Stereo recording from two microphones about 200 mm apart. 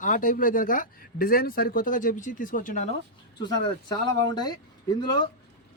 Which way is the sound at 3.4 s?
20° left (ahead or behind).